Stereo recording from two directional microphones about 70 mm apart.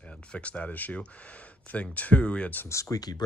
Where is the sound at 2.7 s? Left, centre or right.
Left.